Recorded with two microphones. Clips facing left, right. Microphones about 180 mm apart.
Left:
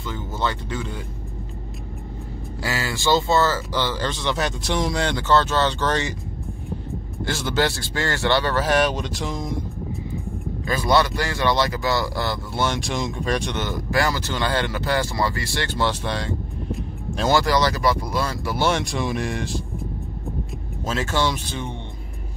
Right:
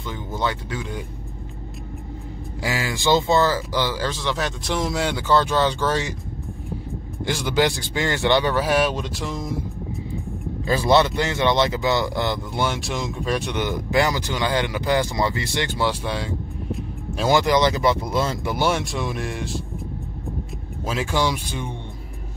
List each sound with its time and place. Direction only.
0.0 s speech: 15° right (ahead or behind)
2.6 s speech: 15° right (ahead or behind)
7.2 s speech: 15° right (ahead or behind)
10.7 s speech: 25° right (ahead or behind)
12.6 s speech: 5° right (ahead or behind)
17.4 s speech: 20° right (ahead or behind)
18.7 s speech: 5° right (ahead or behind)
20.8 s speech: 10° right (ahead or behind)